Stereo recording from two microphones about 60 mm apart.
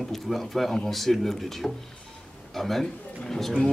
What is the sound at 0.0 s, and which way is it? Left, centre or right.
A man's voice, centre.